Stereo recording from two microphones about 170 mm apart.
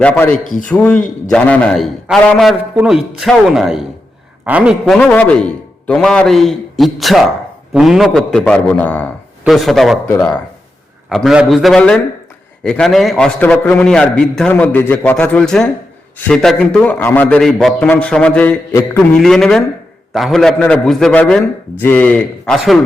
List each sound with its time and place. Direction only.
0.0 s a man's voice: 5° left (ahead or behind)
0.4 s a man's voice: 50° left (ahead or behind)
0.7 s a man's voice: 10° left (ahead or behind)
5.0 s a man's voice: 10° left (ahead or behind)
19.2 s a man's voice: centre (ahead or behind)